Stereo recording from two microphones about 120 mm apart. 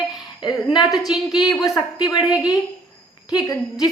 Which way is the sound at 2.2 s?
5° right (ahead or behind).